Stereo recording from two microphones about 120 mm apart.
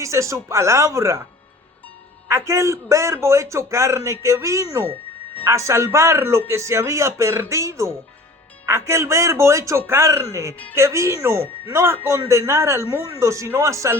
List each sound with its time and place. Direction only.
0.0 s a man's voice: 25° right (ahead or behind)
2.2 s a man's voice: 25° right (ahead or behind)